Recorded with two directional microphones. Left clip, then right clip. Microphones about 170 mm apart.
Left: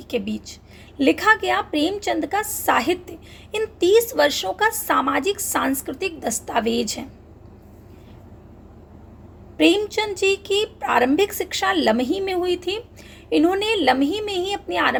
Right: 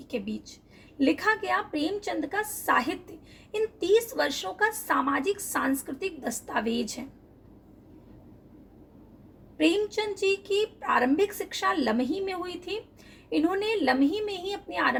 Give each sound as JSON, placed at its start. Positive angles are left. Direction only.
{"t": 0.1, "sound": "a woman's voice", "side_deg": 55}
{"t": 9.6, "sound": "a woman's voice", "side_deg": 50}